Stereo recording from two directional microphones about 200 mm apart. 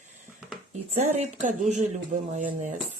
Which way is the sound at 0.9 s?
35° right (ahead or behind).